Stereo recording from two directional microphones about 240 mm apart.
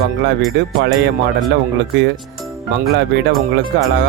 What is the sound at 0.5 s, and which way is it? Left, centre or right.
Speech, right.